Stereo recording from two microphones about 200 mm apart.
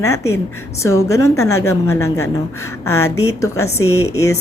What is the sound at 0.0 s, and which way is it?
Speech, 15° left (ahead or behind).